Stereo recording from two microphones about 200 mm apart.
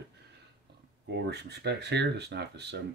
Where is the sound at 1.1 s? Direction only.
55° right (ahead or behind).